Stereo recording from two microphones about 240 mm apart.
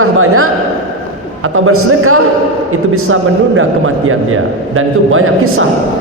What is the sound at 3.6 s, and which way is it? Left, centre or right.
A man's voice, right.